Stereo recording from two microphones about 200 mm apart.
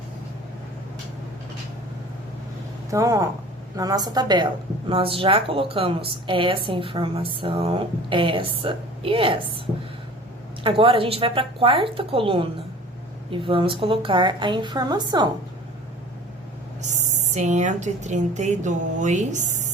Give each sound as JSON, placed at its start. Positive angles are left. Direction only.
{"t": 2.9, "sound": "a woman's voice", "side_deg": -15}
{"t": 10.6, "sound": "a woman's voice", "side_deg": -25}
{"t": 16.8, "sound": "speech", "side_deg": -35}